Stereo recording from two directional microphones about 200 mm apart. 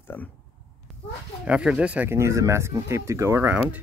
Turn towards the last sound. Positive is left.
turn(degrees=-15)  # may be behind; listen again after turning